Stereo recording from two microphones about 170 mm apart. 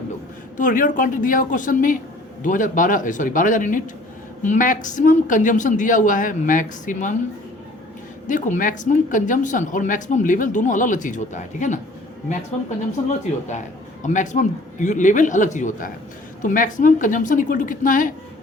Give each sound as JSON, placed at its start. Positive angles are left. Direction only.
{"t": 0.5, "sound": "speech", "side_deg": 50}
{"t": 8.3, "sound": "speech", "side_deg": 50}
{"t": 14.0, "sound": "speech", "side_deg": 45}